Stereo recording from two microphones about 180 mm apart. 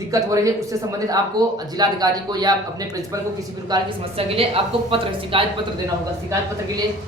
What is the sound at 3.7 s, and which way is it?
Speech, 25° right (ahead or behind).